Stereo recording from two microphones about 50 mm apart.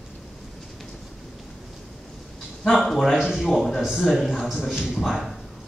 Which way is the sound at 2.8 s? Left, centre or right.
Centre.